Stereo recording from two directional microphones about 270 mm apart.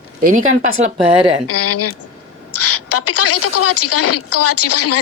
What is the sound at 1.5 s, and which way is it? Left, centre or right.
Speech, left.